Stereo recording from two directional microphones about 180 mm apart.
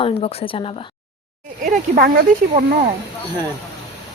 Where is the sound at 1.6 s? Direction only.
55° right (ahead or behind).